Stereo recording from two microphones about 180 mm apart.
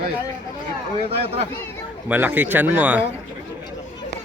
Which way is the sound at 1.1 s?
35° right (ahead or behind).